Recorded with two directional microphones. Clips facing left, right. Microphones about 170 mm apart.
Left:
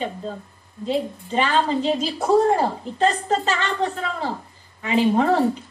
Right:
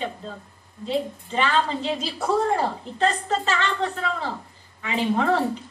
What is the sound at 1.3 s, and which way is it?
A woman's voice, 40° left (ahead or behind).